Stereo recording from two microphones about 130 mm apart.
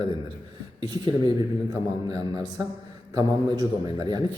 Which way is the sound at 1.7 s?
30° right (ahead or behind).